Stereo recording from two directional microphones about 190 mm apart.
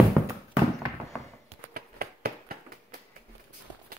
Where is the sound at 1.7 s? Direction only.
55° right (ahead or behind).